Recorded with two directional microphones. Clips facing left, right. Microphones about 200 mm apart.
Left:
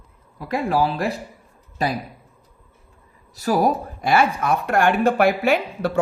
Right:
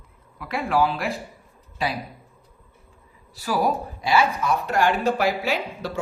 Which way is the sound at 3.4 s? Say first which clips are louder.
Left 4 dB; 45° left (ahead or behind).